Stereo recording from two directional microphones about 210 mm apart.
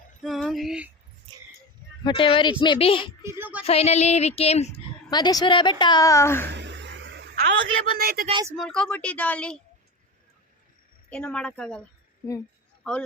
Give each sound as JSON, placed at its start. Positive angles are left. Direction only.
{"t": 0.2, "sound": "female singing", "side_deg": 0}
{"t": 2.0, "sound": "a woman's voice", "side_deg": 25}
{"t": 3.2, "sound": "speech", "side_deg": -10}
{"t": 3.7, "sound": "a sound", "side_deg": 30}
{"t": 5.1, "sound": "a woman's voice", "side_deg": 20}
{"t": 6.5, "sound": "a sound", "side_deg": -55}
{"t": 7.9, "sound": "speech", "side_deg": -45}
{"t": 8.3, "sound": "speech", "side_deg": -20}
{"t": 8.5, "sound": "a woman's voice", "side_deg": 5}
{"t": 11.1, "sound": "a woman's voice", "side_deg": 5}